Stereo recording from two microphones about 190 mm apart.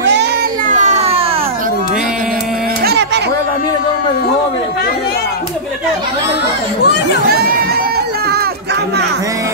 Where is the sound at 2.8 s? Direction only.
60° right (ahead or behind).